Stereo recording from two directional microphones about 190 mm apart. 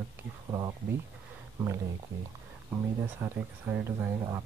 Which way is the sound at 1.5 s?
15° right (ahead or behind).